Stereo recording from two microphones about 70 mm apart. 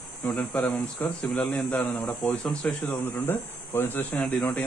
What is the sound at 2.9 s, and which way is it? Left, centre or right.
Speech, left.